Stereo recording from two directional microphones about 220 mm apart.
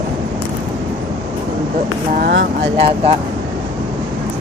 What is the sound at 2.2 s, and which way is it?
Speech, 50° right (ahead or behind).